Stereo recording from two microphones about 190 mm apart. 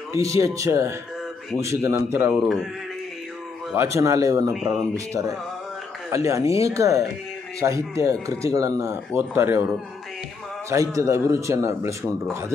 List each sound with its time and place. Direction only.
0.1 s speech: 15° right (ahead or behind)
2.4 s speech: centre (ahead or behind)
3.7 s speech: 15° right (ahead or behind)
10.7 s speech: 15° right (ahead or behind)